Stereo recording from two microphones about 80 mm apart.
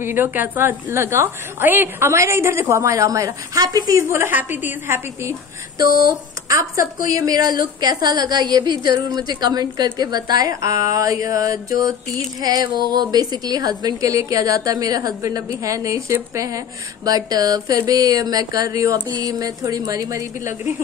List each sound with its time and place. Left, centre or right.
0.0 s a woman's voice: right
4.1 s a woman's voice: right
6.6 s a woman's voice: right